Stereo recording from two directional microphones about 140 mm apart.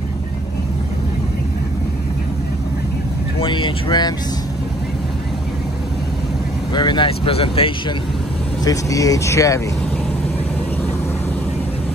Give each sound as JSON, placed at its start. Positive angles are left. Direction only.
{"t": 3.3, "sound": "speech", "side_deg": 35}
{"t": 6.7, "sound": "speech", "side_deg": 35}
{"t": 8.6, "sound": "speech", "side_deg": 25}